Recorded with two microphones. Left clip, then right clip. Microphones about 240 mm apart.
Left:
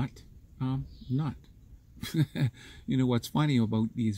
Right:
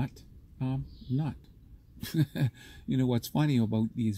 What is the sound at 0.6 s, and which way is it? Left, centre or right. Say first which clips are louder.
A man's voice: left 1 dB; centre.